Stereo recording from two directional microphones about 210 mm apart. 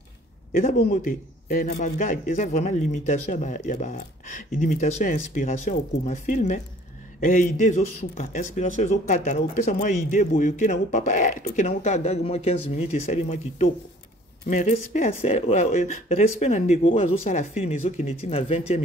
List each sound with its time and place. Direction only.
0.5 s a man's voice: 45° left (ahead or behind); by 18.8 s 30° left (ahead or behind)